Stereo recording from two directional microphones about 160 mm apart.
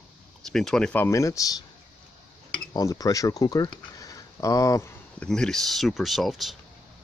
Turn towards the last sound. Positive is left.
turn(degrees=0)  # may be behind; listen again after turning